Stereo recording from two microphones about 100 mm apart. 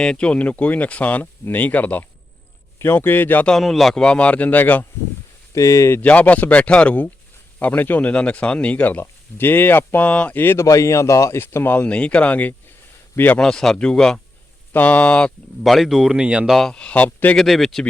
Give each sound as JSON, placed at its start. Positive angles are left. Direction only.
{"t": 0.0, "sound": "speech", "side_deg": 10}
{"t": 3.5, "sound": "speech", "side_deg": 0}
{"t": 5.5, "sound": "speech", "side_deg": 30}
{"t": 6.0, "sound": "speech", "side_deg": 15}
{"t": 13.4, "sound": "speech", "side_deg": 5}
{"t": 15.6, "sound": "speech", "side_deg": 0}
{"t": 16.5, "sound": "speech", "side_deg": 5}
{"t": 17.3, "sound": "speech", "side_deg": 0}